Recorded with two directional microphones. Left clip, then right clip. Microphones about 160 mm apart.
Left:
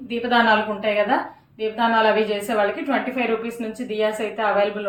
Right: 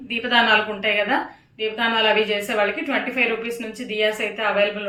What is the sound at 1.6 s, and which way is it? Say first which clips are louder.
A woman's voice: left 1 dB; 35° left (ahead or behind).